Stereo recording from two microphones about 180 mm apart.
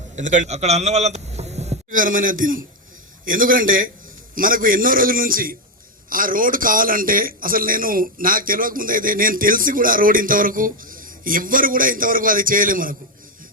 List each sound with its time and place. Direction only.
0.2 s a man's voice: 45° right (ahead or behind)